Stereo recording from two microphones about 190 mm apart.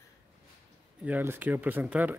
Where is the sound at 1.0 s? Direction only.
10° right (ahead or behind).